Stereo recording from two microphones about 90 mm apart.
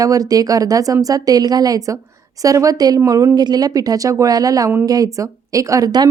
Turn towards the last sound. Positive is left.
turn(degrees=-45)  # may be behind; listen again after turning